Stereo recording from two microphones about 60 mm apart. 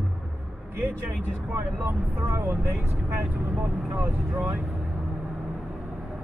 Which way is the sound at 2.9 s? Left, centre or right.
Centre.